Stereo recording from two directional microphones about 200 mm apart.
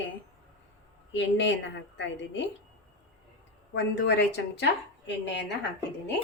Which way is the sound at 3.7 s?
60° left (ahead or behind).